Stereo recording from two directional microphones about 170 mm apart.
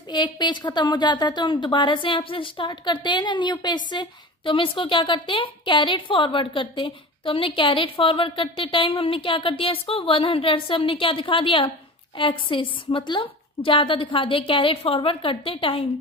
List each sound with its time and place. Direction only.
0.1 s a woman's voice: 25° left (ahead or behind)